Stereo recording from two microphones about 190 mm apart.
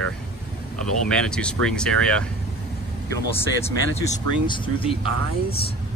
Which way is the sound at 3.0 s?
15° left (ahead or behind).